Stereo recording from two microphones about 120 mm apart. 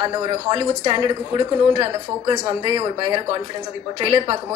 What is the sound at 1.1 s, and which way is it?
Speech, 50° right (ahead or behind).